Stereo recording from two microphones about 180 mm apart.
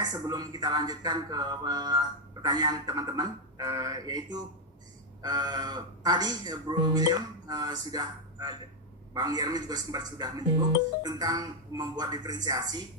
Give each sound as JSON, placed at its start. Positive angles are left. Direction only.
{"t": 0.0, "sound": "speech", "side_deg": -20}